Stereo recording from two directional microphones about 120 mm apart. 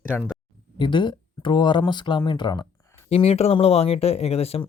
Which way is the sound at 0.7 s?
40° left (ahead or behind).